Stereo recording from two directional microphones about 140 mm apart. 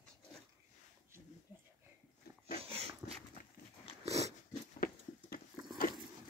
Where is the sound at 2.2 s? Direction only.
90° left.